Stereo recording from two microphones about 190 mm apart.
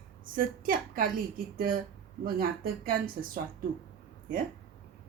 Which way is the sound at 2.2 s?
50° right (ahead or behind).